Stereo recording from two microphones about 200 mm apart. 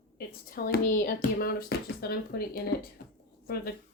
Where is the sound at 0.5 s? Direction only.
45° left (ahead or behind).